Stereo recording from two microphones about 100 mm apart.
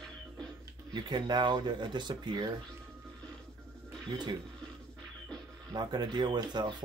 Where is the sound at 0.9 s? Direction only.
50° right (ahead or behind).